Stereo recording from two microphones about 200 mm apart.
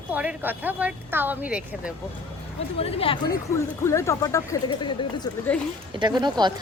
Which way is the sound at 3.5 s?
15° left (ahead or behind).